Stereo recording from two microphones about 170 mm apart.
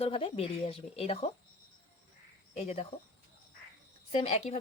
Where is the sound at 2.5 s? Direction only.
35° left (ahead or behind).